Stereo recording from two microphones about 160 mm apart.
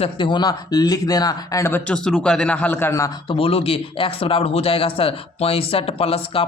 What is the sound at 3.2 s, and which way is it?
Speech, 35° left (ahead or behind).